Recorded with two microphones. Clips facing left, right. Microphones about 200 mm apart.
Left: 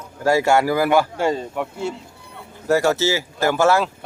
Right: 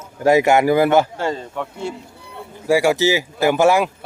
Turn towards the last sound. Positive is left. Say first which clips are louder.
# right 2 dB
turn(degrees=-15)  # may be behind; listen again after turning